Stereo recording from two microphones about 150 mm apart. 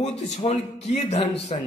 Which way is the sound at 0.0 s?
50° left (ahead or behind).